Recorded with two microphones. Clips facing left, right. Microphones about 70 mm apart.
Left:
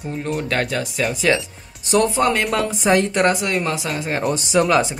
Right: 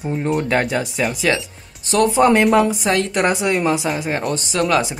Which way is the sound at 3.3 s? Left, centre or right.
Centre.